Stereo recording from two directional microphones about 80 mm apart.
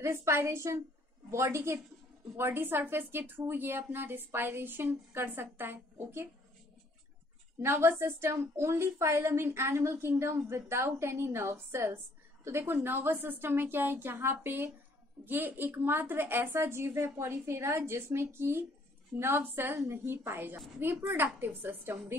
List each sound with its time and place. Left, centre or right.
0.0 s a woman's voice: right
7.6 s a woman's voice: right